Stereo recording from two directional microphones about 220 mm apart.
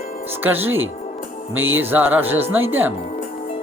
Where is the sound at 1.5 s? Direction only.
65° right (ahead or behind).